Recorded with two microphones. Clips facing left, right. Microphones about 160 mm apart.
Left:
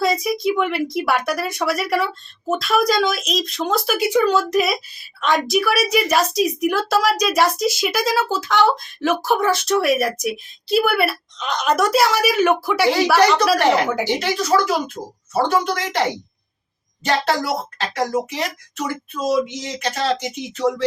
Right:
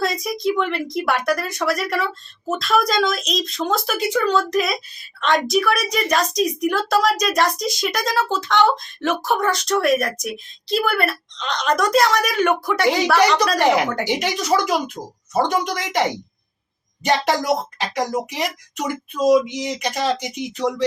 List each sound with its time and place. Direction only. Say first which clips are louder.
0.0 s a woman's voice: left 2 dB; centre (ahead or behind)
13.6 s speech: even; 15° right (ahead or behind)